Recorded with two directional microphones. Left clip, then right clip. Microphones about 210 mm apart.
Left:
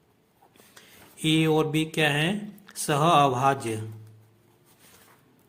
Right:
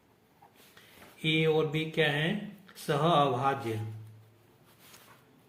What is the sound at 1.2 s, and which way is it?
Speech, 40° left (ahead or behind).